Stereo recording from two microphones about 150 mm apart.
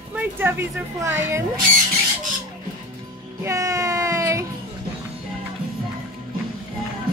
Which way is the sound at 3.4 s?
20° right (ahead or behind).